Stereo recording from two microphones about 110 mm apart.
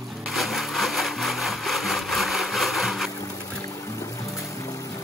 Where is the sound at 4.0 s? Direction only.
30° left (ahead or behind).